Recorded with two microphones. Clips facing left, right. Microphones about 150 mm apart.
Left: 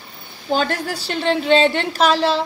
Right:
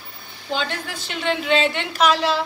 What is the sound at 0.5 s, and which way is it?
A woman's voice, 40° left (ahead or behind).